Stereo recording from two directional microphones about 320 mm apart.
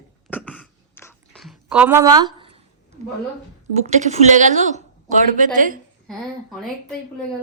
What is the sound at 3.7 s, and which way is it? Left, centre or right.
A woman's voice, right.